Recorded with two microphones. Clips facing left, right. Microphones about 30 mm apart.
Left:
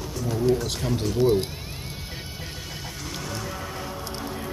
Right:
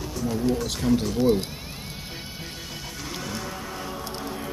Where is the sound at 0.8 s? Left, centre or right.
Centre.